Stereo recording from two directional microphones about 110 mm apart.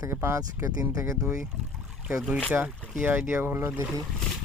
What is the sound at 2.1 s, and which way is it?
Speech, centre (ahead or behind).